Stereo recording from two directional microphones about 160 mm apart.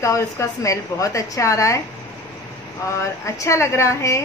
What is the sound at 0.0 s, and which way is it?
A woman's voice, 20° left (ahead or behind).